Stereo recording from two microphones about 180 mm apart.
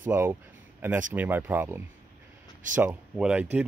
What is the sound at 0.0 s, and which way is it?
Speech, 10° right (ahead or behind).